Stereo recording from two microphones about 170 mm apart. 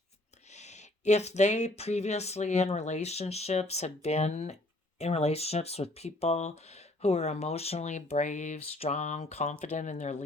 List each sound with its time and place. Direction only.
0.5 s speech: 40° left (ahead or behind)